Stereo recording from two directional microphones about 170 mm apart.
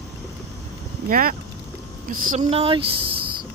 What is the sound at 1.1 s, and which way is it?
A woman's voice, 55° right (ahead or behind).